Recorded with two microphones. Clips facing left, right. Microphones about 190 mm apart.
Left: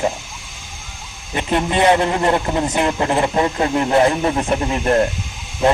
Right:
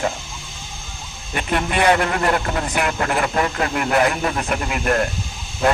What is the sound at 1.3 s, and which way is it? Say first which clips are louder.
A man's voice: left 3 dB; 20° left (ahead or behind).